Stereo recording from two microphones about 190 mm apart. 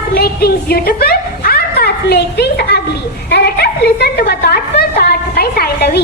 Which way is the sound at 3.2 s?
55° left (ahead or behind).